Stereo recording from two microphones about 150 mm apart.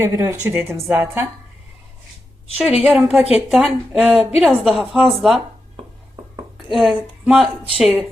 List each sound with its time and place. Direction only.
0.0 s a woman's voice: 20° right (ahead or behind)
2.6 s speech: centre (ahead or behind)
6.7 s speech: centre (ahead or behind)